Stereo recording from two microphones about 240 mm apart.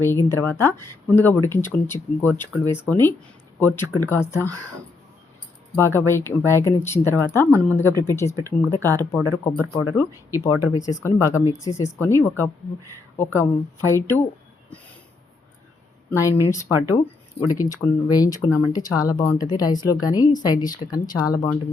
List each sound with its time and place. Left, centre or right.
0.0 s speech: centre
5.7 s speech: centre
16.0 s speech: centre